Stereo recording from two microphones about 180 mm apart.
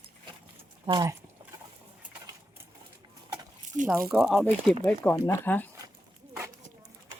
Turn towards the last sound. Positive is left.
turn(degrees=10)  # may be behind; listen again after turning